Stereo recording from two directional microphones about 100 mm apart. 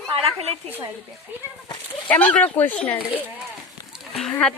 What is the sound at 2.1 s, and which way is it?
Speech, 15° left (ahead or behind).